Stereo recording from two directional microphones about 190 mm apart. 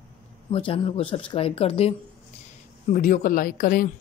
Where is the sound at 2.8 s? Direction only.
45° left (ahead or behind).